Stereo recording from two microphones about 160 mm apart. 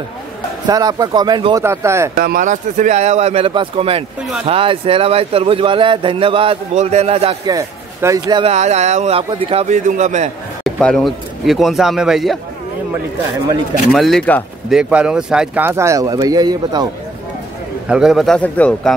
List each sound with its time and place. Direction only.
0.7 s speech: 25° right (ahead or behind)
1.6 s speech: 15° right (ahead or behind)
2.1 s speech: 65° right (ahead or behind); by 7.3 s 40° right (ahead or behind)
7.4 s speech: 20° right (ahead or behind)
8.5 s speech: 45° right (ahead or behind)
10.6 s speech: 5° left (ahead or behind)
13.9 s speech: centre (ahead or behind)
14.7 s speech: 5° right (ahead or behind); by 16.8 s 25° right (ahead or behind)
17.8 s speech: 5° right (ahead or behind)